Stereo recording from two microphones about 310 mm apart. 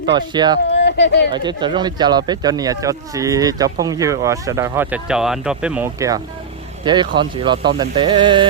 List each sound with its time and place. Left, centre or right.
0.1 s speech: centre
0.7 s a sound: left
1.3 s speech: centre